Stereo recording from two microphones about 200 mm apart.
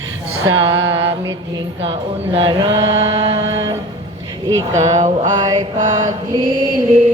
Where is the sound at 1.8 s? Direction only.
25° right (ahead or behind).